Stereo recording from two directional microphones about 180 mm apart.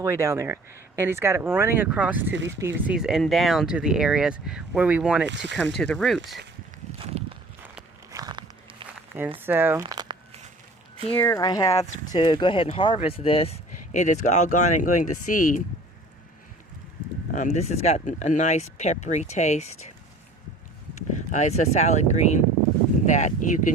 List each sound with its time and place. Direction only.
0.0 s speech: 15° right (ahead or behind)
5.2 s speech: 80° right
5.7 s speech: 5° left (ahead or behind)
7.0 s a sound: 30° right (ahead or behind)
9.4 s speech: 10° right (ahead or behind)
9.8 s crumpling: 25° right (ahead or behind)
11.2 s speech: 15° left (ahead or behind); by 15.6 s 45° left (ahead or behind)
17.3 s speech: 40° left (ahead or behind)
21.3 s speech: 40° left (ahead or behind)